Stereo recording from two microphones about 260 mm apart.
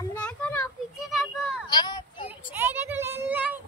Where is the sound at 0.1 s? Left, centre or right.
Centre.